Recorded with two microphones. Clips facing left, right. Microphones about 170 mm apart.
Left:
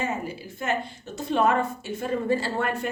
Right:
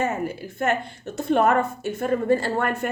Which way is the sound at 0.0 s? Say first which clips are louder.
Right 4 dB; 50° right (ahead or behind).